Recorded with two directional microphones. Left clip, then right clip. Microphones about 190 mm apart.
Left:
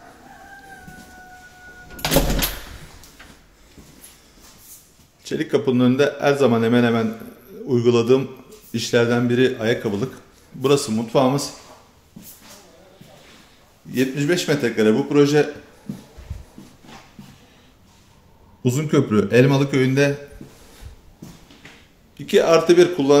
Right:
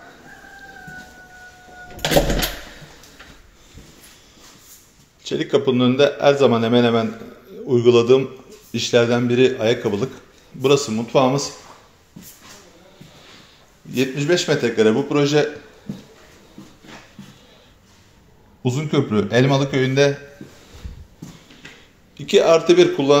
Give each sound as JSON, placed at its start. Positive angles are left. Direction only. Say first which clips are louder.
{"t": 5.2, "sound": "a man's voice", "louder": "right 2 dB", "side_deg": 10}
{"t": 13.9, "sound": "a man's voice", "louder": "right 2 dB", "side_deg": 15}
{"t": 18.6, "sound": "a man's voice", "louder": "left 1 dB", "side_deg": 25}
{"t": 22.1, "sound": "speech", "louder": "right 1 dB", "side_deg": 10}